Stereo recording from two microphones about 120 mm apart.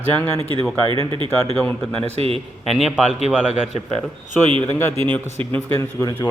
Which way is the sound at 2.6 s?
Centre (ahead or behind).